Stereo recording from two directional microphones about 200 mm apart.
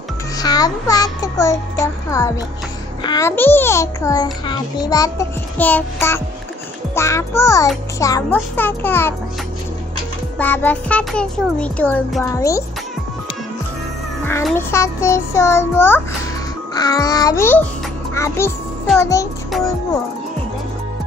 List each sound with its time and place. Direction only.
0.4 s a child's voice: 20° left (ahead or behind)
10.4 s speech: 10° left (ahead or behind)
14.5 s a child's voice: 15° left (ahead or behind)